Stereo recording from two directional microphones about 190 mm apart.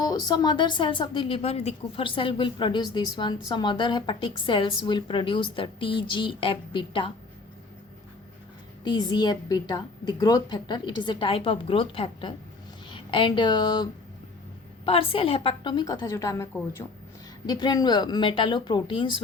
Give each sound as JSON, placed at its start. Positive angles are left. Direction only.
{"t": 0.0, "sound": "a woman's voice", "side_deg": 20}
{"t": 8.8, "sound": "a woman's voice", "side_deg": 20}
{"t": 14.8, "sound": "a woman's voice", "side_deg": 30}